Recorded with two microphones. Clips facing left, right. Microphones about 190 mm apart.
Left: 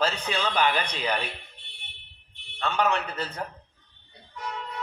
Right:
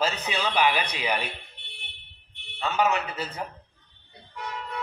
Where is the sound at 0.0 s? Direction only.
10° right (ahead or behind).